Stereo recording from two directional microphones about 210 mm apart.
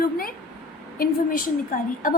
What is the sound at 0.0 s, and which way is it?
A woman's voice, 45° left (ahead or behind).